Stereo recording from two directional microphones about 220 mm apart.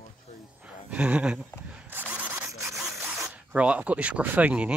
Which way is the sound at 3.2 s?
5° right (ahead or behind).